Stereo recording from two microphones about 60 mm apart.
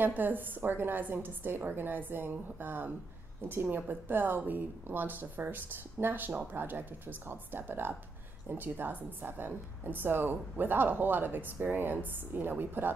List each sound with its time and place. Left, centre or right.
0.0 s speech: right